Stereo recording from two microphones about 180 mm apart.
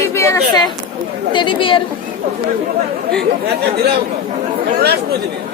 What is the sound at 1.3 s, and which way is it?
Speech, 25° left (ahead or behind).